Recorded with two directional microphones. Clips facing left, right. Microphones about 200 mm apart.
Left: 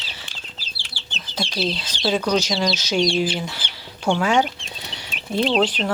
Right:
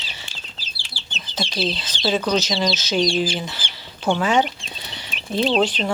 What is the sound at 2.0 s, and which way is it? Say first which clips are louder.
Speech: even; centre (ahead or behind).